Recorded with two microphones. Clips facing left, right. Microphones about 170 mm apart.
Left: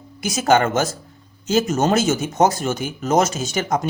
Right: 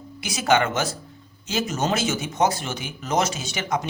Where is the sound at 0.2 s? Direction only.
45° left (ahead or behind).